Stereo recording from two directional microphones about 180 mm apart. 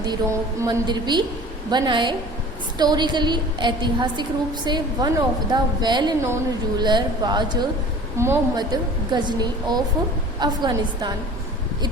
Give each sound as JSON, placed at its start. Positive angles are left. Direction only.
{"t": 0.0, "sound": "a woman's voice", "side_deg": -20}